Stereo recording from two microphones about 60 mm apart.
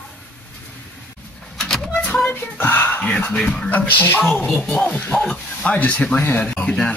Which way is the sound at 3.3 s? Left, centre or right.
Centre.